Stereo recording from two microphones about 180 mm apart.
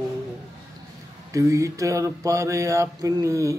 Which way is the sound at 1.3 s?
15° right (ahead or behind).